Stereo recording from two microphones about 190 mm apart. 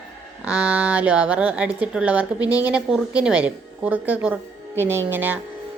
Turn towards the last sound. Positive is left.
turn(degrees=-10)  # may be behind; listen again after turning